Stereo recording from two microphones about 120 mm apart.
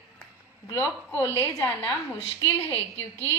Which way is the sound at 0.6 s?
25° left (ahead or behind).